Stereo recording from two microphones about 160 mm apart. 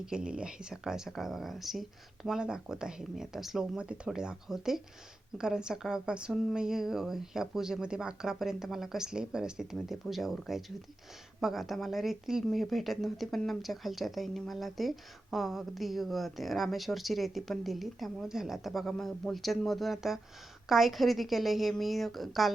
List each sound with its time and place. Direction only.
0.0 s speech: 5° right (ahead or behind)